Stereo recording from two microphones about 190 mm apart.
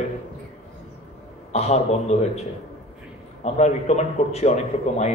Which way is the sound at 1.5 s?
35° left (ahead or behind).